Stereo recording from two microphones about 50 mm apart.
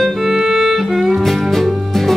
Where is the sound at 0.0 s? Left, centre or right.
Centre.